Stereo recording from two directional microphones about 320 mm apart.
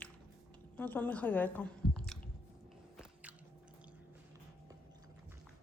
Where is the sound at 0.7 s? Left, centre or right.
Centre.